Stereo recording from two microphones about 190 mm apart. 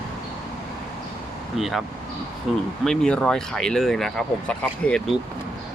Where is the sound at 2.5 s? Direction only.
Centre (ahead or behind).